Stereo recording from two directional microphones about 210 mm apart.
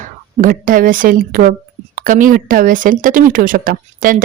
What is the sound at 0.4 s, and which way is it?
Speech, 40° right (ahead or behind).